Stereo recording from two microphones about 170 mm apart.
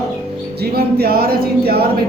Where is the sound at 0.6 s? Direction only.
65° right (ahead or behind).